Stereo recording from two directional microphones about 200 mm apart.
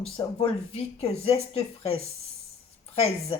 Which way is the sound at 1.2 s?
30° left (ahead or behind).